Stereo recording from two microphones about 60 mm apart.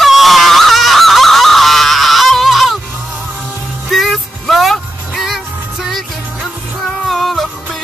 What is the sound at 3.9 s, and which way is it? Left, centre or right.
Music, centre.